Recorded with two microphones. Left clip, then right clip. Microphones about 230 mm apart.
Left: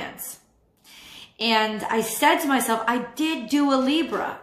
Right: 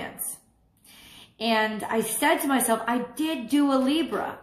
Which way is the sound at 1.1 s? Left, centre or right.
Centre.